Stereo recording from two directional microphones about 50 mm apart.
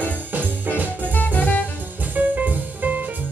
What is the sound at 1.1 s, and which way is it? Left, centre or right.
Music, left.